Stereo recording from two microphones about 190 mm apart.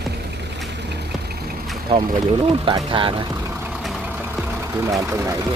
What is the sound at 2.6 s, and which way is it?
Speech, 25° right (ahead or behind).